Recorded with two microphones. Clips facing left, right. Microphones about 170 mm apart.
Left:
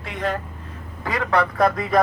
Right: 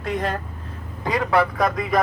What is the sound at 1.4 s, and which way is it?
Speech, centre (ahead or behind).